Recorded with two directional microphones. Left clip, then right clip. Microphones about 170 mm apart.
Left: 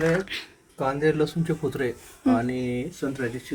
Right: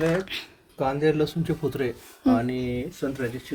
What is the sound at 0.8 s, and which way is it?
Speech, 30° right (ahead or behind).